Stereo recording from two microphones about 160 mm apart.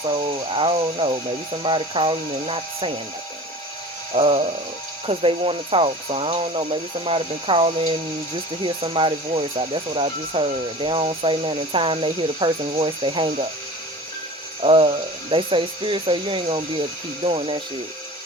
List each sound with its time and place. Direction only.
0.5 s speech: 35° right (ahead or behind)
4.1 s speech: 35° right (ahead or behind)
14.6 s speech: 35° right (ahead or behind)